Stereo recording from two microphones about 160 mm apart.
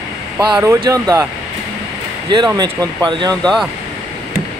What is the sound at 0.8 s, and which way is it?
Speech, 25° right (ahead or behind).